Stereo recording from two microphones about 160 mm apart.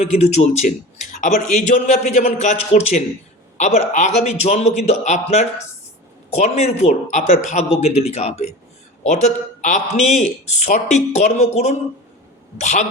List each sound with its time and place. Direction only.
0.0 s speech: 40° left (ahead or behind)